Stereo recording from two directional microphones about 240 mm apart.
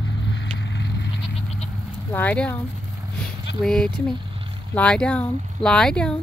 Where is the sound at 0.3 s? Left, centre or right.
Left.